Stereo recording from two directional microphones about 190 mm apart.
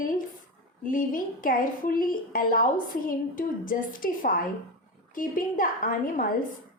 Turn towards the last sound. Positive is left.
turn(degrees=45)  # may be behind; listen again after turning